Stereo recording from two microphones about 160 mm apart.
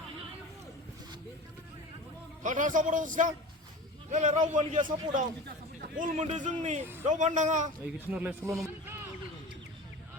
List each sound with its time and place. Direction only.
2.4 s a man's voice: 55° right (ahead or behind)
7.9 s a man's voice: 10° right (ahead or behind)